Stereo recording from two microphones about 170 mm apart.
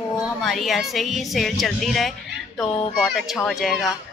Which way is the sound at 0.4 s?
Centre (ahead or behind).